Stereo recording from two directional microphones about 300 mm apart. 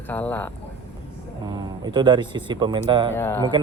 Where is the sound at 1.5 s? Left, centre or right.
Centre.